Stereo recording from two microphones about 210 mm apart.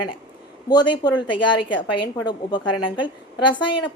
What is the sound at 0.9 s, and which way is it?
A woman's voice, 20° left (ahead or behind).